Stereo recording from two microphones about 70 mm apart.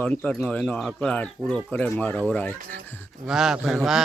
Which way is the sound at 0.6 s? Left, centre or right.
Centre.